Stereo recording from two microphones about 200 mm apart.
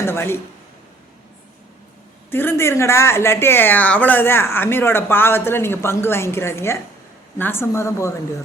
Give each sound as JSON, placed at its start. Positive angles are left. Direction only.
{"t": 0.0, "sound": "speech", "side_deg": 10}
{"t": 2.3, "sound": "speech", "side_deg": 10}